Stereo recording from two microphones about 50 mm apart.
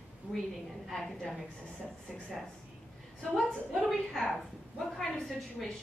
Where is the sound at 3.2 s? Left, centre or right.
Centre.